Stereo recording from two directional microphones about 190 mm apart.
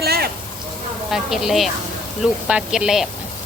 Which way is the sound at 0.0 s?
55° right (ahead or behind).